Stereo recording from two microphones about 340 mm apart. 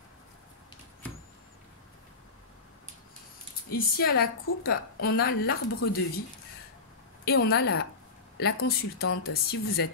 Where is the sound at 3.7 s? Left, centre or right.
Left.